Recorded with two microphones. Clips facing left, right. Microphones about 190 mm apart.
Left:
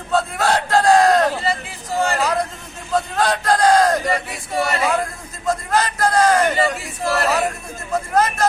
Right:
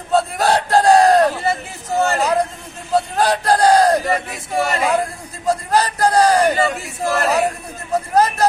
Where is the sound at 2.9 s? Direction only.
35° right (ahead or behind).